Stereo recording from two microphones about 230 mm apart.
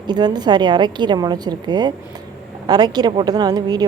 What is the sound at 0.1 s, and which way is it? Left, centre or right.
Speech, centre.